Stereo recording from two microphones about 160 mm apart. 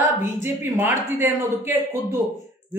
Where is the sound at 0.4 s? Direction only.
15° right (ahead or behind).